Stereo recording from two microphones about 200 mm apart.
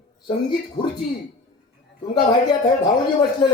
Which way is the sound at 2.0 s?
20° left (ahead or behind).